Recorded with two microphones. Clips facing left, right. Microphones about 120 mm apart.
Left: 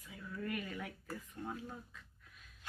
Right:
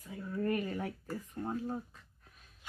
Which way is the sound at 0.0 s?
40° right (ahead or behind).